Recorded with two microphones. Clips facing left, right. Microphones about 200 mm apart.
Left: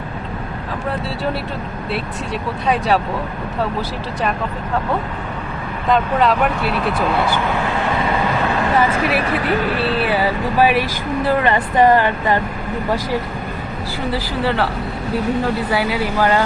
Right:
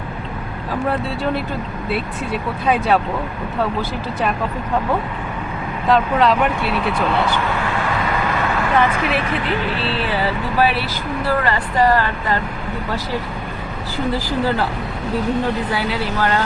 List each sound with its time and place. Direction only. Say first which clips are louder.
1.9 s speech: right 1 dB; centre (ahead or behind)
5.9 s speech: even; centre (ahead or behind)
8.4 s speech: right 1 dB; 35° left (ahead or behind)
10.0 s a sound: left 3 dB; 10° left (ahead or behind)
11.3 s speech: left 3 dB; 20° left (ahead or behind)
15.7 s a sound: left 3 dB; 10° left (ahead or behind)